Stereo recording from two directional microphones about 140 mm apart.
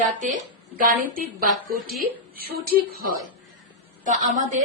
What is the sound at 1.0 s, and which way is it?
A woman's voice, 80° right.